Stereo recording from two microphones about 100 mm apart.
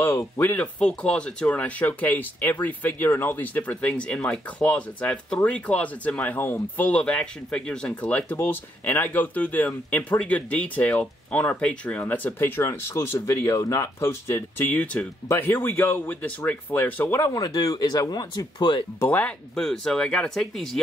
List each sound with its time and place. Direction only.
0.0 s speech: 25° left (ahead or behind); by 18.9 s 50° left (ahead or behind)
18.9 s speech: 20° left (ahead or behind)
19.5 s speech: 5° left (ahead or behind)